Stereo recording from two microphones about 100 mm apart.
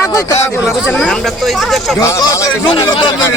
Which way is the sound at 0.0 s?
35° left (ahead or behind).